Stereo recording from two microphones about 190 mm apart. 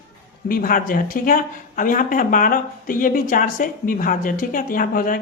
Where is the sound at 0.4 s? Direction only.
50° left (ahead or behind).